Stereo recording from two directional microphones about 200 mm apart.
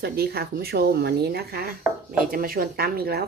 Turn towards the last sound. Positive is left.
turn(degrees=-50)  # may be behind; listen again after turning